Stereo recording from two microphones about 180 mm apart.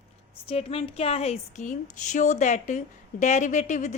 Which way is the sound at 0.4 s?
30° left (ahead or behind).